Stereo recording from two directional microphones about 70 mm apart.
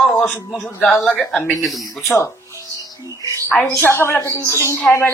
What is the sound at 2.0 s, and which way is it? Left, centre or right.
Speech, left.